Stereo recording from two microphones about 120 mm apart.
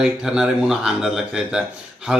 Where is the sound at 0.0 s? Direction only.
5° right (ahead or behind).